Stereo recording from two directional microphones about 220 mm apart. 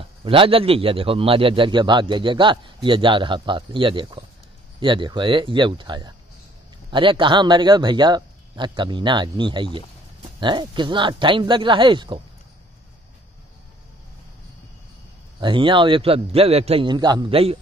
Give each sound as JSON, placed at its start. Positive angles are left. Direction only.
{"t": 0.0, "sound": "a man's voice", "side_deg": -25}
{"t": 15.4, "sound": "a man's voice", "side_deg": -20}